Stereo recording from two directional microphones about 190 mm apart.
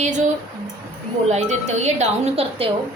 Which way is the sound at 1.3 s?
35° right (ahead or behind).